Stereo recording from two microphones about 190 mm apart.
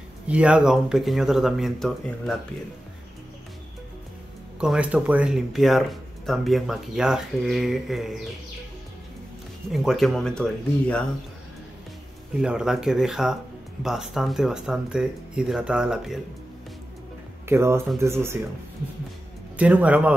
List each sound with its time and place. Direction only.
0.3 s speech: 5° right (ahead or behind)
4.6 s speech: 5° right (ahead or behind)
9.7 s speech: centre (ahead or behind)
12.4 s speech: 5° right (ahead or behind)
17.5 s speech: 15° right (ahead or behind)
19.5 s speech: 5° right (ahead or behind)